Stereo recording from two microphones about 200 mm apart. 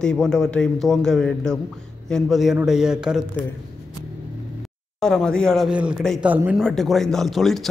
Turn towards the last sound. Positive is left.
turn(degrees=0)  # may be behind; listen again after turning